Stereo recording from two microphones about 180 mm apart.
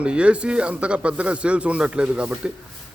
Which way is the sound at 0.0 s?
5° right (ahead or behind).